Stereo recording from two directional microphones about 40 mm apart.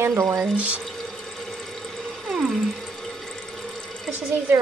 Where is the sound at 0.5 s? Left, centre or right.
Right.